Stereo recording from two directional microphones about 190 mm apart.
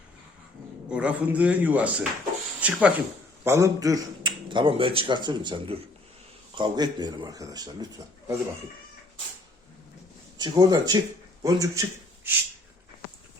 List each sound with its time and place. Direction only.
0.9 s a man's voice: 5° right (ahead or behind)
10.3 s speech: 20° right (ahead or behind)